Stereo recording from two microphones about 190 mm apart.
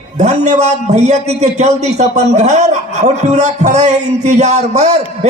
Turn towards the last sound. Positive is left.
turn(degrees=-35)  # may be behind; listen again after turning